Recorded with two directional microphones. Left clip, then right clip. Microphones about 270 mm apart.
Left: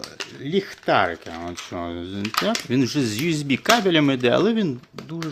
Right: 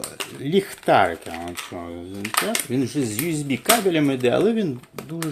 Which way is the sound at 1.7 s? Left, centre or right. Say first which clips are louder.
Left 3 dB; left.